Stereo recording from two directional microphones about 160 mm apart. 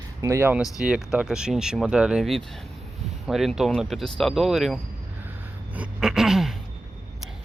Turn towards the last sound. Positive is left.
turn(degrees=-5)  # may be behind; listen again after turning